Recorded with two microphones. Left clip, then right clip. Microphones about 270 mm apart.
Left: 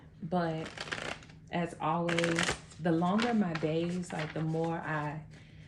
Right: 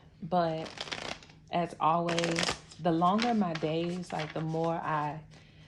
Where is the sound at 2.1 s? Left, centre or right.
Centre.